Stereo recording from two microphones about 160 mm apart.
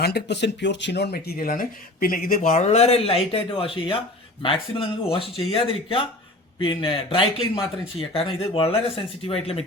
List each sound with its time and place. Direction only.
0.0 s speech: 90° left; by 9.6 s 35° left (ahead or behind)